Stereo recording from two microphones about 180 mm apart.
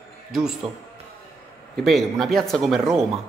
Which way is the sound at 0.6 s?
30° right (ahead or behind).